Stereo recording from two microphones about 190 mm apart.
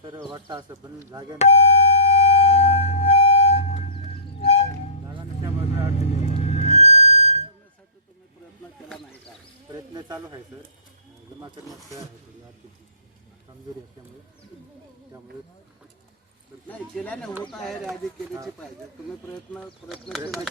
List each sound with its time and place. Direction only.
0.0 s speech: 25° right (ahead or behind)
1.4 s music: 35° left (ahead or behind)
6.1 s music: 35° left (ahead or behind)
9.7 s a sound: 20° right (ahead or behind)
16.6 s speech: 5° left (ahead or behind)
19.5 s speech: centre (ahead or behind)